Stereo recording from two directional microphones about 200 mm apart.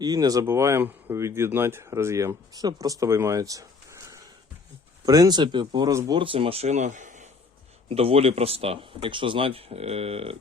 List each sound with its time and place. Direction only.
0.0 s speech: 20° right (ahead or behind)